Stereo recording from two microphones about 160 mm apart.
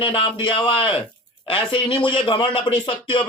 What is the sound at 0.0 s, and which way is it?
A man's voice, 35° left (ahead or behind).